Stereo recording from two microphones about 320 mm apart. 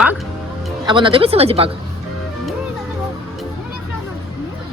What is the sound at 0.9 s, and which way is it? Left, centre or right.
Speech, centre.